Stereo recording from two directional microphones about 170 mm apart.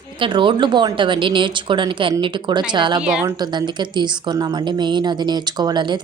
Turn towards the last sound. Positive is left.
turn(degrees=-25)  # may be behind; listen again after turning